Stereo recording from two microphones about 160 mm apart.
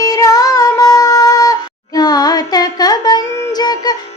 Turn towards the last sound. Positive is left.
turn(degrees=25)  # may be behind; listen again after turning